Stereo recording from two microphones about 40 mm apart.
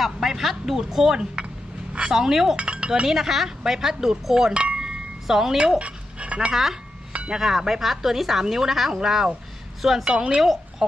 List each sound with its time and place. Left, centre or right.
0.0 s speech: centre
2.5 s chink: right
3.1 s speech: centre
4.7 s chime: centre
5.6 s dog: right
6.5 s speech: centre
10.0 s speech: centre
10.4 s a woman's voice: centre